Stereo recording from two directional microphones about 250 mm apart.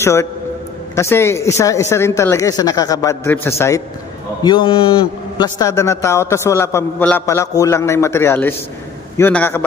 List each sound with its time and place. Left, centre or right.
0.0 s a man's voice: centre